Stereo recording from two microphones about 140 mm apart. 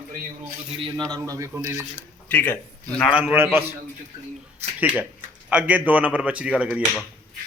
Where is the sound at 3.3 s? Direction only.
15° right (ahead or behind).